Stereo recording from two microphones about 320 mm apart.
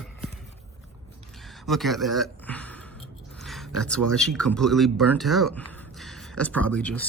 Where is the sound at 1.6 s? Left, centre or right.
Centre.